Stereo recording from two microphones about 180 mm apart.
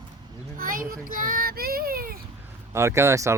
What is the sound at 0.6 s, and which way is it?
A child's voice, 50° right (ahead or behind).